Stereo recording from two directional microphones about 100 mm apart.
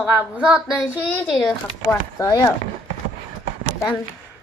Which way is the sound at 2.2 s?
35° left (ahead or behind).